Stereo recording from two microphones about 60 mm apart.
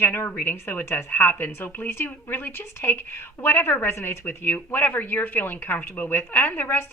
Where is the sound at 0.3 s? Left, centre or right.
Left.